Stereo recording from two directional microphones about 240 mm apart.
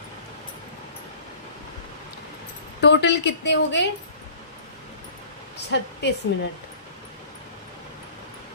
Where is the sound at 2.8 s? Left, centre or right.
Left.